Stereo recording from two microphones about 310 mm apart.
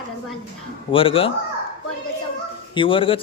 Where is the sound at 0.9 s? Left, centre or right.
Centre.